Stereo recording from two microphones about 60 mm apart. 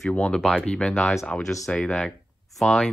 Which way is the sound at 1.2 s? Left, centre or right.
Centre.